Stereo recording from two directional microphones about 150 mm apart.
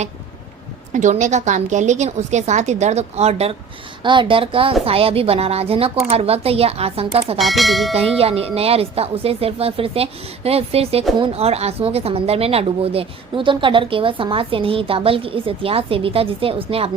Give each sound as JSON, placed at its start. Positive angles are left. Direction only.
{"t": 0.9, "sound": "a woman's voice", "side_deg": -55}
{"t": 4.0, "sound": "speech", "side_deg": -30}
{"t": 7.3, "sound": "speech", "side_deg": 0}
{"t": 8.2, "sound": "speech", "side_deg": -40}